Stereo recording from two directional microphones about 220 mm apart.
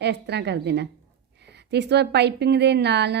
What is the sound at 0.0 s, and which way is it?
Speech, 50° right (ahead or behind).